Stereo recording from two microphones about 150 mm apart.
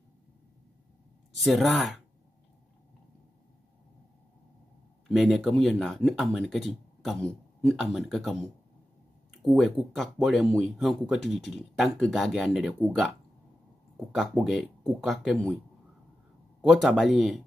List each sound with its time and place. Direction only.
1.3 s speech: centre (ahead or behind)
5.0 s speech: centre (ahead or behind)
9.6 s speech: centre (ahead or behind)
16.6 s speech: centre (ahead or behind)